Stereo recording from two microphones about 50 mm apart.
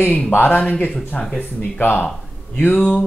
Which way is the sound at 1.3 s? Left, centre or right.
Left.